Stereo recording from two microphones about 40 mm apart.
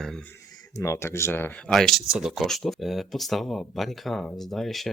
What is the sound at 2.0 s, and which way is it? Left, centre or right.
Speech, centre.